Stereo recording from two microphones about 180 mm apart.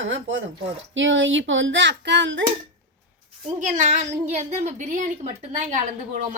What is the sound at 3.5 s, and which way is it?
A child's voice, 40° right (ahead or behind).